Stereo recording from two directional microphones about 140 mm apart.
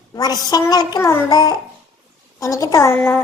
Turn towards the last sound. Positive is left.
turn(degrees=15)  # may be behind; listen again after turning